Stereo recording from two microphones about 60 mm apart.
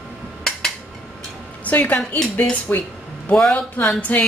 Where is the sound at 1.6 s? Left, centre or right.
Left.